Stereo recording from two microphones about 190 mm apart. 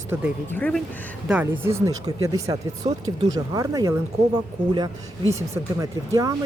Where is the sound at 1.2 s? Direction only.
5° right (ahead or behind).